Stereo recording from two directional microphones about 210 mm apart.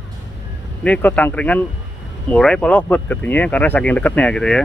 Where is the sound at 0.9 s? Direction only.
10° left (ahead or behind).